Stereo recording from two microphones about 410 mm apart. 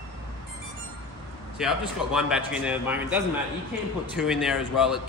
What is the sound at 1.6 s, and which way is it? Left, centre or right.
A man's voice, centre.